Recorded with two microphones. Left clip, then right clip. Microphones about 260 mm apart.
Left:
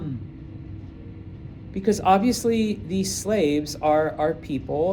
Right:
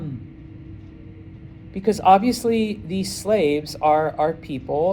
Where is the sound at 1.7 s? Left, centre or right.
Right.